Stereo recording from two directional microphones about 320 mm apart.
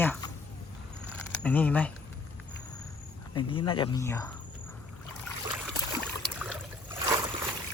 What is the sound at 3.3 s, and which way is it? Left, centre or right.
Speech, centre.